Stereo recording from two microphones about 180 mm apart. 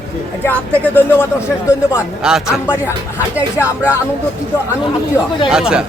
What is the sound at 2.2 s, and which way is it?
Speech, 5° right (ahead or behind).